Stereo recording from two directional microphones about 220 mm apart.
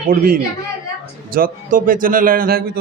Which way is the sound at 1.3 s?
40° right (ahead or behind).